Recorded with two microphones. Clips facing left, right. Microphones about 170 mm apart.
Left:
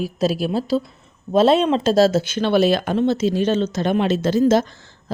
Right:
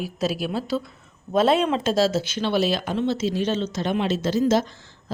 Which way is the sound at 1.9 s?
50° left (ahead or behind).